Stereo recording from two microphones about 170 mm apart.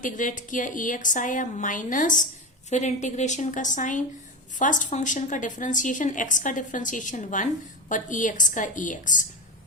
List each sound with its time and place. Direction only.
0.0 s a woman's voice: 50° left (ahead or behind)